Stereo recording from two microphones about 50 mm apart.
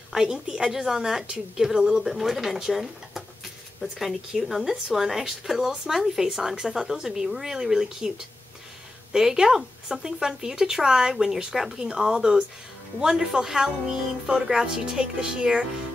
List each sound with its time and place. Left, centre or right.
0.1 s speech: centre
9.1 s speech: centre